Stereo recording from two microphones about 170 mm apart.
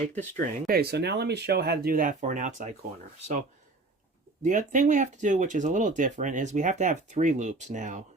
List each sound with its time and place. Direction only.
0.3 s speech: 65° right (ahead or behind); by 2.7 s 45° right (ahead or behind)
4.4 s speech: 45° right (ahead or behind)